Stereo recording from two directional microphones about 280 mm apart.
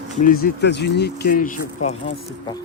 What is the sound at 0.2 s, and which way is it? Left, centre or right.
Speech, left.